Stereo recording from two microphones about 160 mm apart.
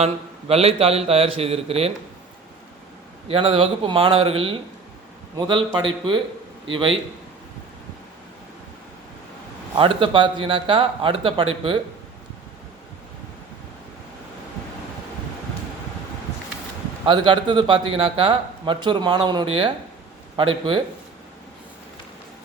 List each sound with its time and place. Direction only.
0.0 s speech: 40° right (ahead or behind)
3.2 s speech: 35° right (ahead or behind)
9.7 s speech: 30° right (ahead or behind)
17.1 s a man's voice: 30° right (ahead or behind)